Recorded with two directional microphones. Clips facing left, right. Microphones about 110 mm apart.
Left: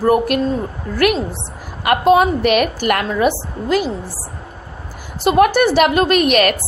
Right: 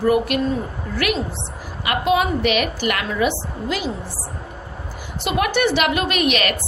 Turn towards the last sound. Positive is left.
turn(degrees=45)  # may be behind; listen again after turning